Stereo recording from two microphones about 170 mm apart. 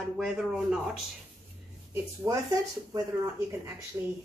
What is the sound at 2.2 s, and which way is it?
Speech, 20° right (ahead or behind).